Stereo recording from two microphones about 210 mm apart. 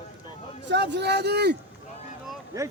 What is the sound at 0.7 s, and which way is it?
Speech, 55° right (ahead or behind).